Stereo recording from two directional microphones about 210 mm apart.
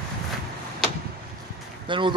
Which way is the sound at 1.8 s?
25° right (ahead or behind).